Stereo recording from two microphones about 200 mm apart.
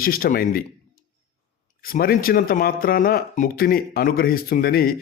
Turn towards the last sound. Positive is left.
turn(degrees=50)  # may be behind; listen again after turning